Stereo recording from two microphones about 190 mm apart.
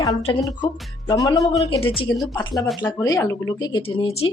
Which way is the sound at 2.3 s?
25° left (ahead or behind).